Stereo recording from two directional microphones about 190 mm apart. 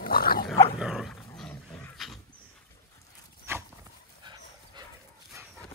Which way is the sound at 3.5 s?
15° right (ahead or behind).